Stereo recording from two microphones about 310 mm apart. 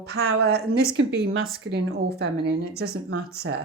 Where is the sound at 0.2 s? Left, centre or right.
Right.